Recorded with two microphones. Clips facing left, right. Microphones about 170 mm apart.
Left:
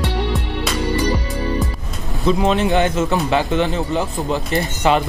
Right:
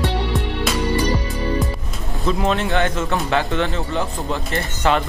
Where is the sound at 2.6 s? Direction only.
20° left (ahead or behind).